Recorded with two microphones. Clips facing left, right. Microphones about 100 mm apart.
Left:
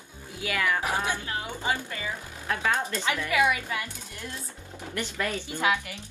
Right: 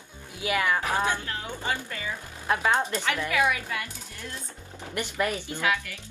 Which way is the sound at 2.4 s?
25° right (ahead or behind).